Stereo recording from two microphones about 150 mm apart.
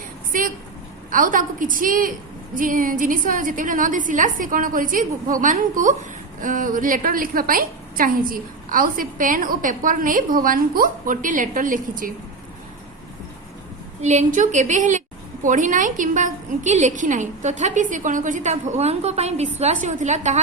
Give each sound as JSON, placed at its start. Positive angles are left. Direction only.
{"t": 0.3, "sound": "vehicle", "side_deg": -65}
{"t": 1.1, "sound": "a woman's voice", "side_deg": -65}
{"t": 14.0, "sound": "a woman's voice", "side_deg": -50}